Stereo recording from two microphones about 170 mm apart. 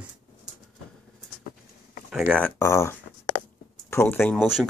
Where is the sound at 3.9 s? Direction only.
15° left (ahead or behind).